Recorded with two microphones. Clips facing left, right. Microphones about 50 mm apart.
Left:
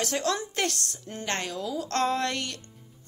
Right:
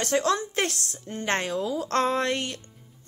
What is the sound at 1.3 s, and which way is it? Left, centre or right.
Speech, right.